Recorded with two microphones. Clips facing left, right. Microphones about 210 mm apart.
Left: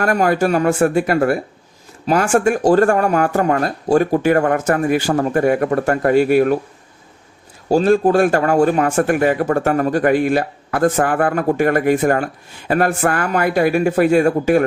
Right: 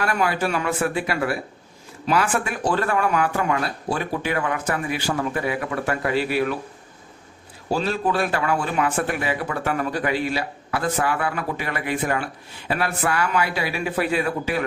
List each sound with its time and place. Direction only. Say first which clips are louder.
0.0 s speech: left 7 dB; 45° left (ahead or behind)
7.7 s speech: left 10 dB; 45° left (ahead or behind)